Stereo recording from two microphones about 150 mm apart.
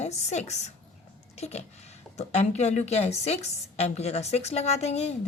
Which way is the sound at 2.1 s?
45° left (ahead or behind).